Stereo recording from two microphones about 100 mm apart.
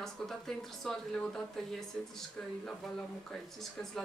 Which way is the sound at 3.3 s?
5° left (ahead or behind).